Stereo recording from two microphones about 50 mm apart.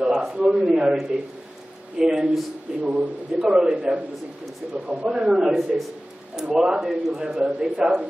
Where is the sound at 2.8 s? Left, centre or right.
Right.